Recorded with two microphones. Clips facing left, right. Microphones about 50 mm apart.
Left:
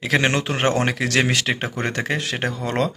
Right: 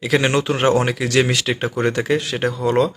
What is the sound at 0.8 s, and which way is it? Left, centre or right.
Speech, left.